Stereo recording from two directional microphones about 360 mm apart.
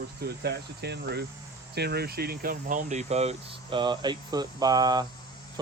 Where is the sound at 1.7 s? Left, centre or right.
Right.